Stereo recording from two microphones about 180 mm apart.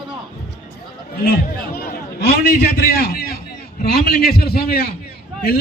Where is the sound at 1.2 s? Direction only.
60° left (ahead or behind).